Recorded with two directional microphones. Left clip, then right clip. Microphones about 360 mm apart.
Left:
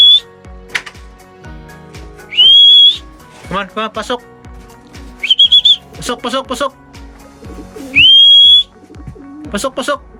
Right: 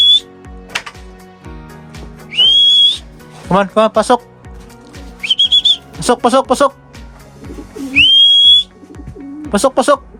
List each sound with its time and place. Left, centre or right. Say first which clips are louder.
2.3 s whistle: left 4 dB; centre
3.5 s speech: right 8 dB; centre
5.2 s music: left 3 dB; centre
7.9 s whistle: left 3 dB; centre
9.5 s speech: right 6 dB; centre